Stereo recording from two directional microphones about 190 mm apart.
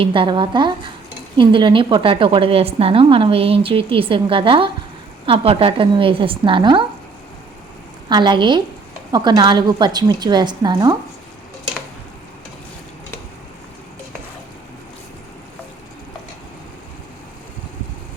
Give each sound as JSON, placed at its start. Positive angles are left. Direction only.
{"t": 0.0, "sound": "a woman's voice", "side_deg": -25}
{"t": 8.1, "sound": "a woman's voice", "side_deg": -25}